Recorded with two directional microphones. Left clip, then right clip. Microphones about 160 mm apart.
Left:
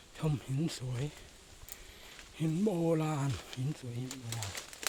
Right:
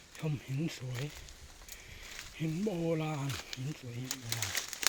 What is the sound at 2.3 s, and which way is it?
Speech, 40° left (ahead or behind).